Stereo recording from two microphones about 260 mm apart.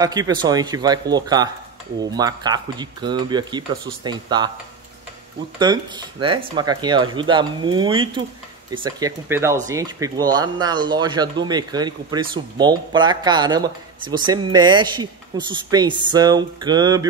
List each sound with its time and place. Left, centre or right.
0.0 s speech: centre
5.6 s speech: centre